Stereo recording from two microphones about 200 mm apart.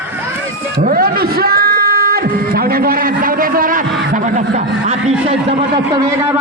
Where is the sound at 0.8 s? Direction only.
45° right (ahead or behind).